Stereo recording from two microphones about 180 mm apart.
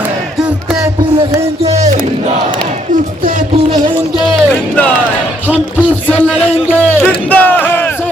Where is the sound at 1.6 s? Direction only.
40° right (ahead or behind).